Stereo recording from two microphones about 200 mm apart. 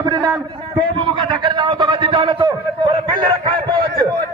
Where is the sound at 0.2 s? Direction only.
Centre (ahead or behind).